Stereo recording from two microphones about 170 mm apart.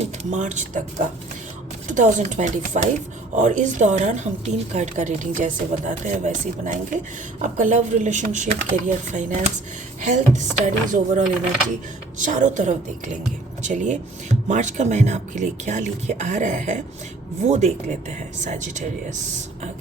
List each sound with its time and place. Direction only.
0.0 s a woman's voice: 45° right (ahead or behind)